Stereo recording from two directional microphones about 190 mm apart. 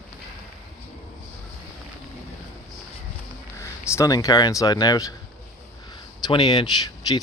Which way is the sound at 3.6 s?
15° left (ahead or behind).